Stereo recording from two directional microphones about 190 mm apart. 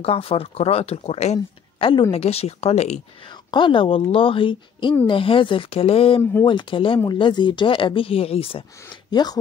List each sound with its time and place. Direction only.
0.0 s speech: 30° left (ahead or behind)